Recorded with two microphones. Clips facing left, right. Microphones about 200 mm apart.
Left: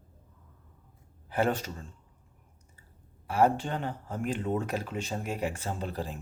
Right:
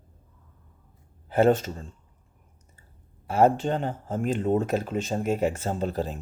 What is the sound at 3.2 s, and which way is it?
Speech, 25° right (ahead or behind).